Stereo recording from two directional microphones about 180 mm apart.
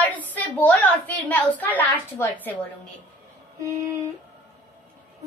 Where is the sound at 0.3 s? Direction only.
10° left (ahead or behind).